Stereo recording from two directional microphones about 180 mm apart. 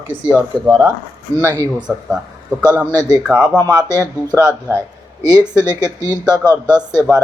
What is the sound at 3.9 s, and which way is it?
Speech, 20° right (ahead or behind).